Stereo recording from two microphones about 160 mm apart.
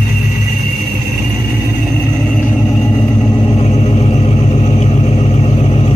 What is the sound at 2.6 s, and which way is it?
Vehicle, 20° left (ahead or behind).